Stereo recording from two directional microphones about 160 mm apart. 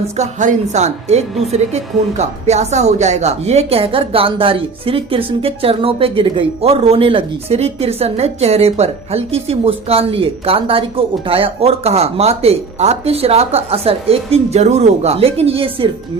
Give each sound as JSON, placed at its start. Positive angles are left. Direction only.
{"t": 0.2, "sound": "a woman's voice", "side_deg": -50}